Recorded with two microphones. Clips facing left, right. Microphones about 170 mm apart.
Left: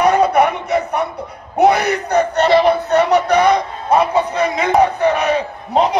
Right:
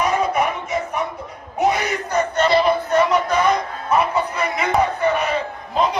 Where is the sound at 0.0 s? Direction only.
70° left (ahead or behind).